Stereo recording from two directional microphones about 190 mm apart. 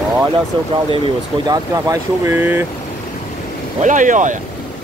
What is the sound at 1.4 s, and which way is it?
Speech, 20° right (ahead or behind).